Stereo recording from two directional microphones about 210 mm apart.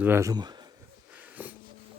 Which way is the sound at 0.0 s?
10° right (ahead or behind).